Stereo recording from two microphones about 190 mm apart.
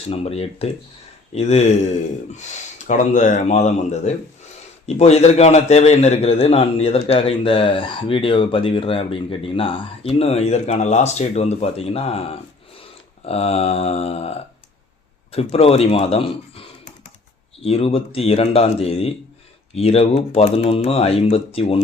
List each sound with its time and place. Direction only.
0.1 s a man's voice: 30° left (ahead or behind)